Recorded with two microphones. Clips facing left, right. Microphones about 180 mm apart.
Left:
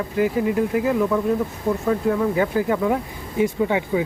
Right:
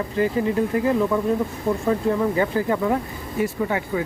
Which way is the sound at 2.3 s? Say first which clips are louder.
Left 1 dB; 10° left (ahead or behind).